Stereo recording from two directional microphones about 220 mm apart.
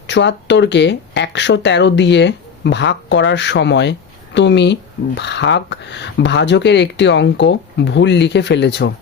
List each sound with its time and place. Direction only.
0.1 s speech: 50° left (ahead or behind)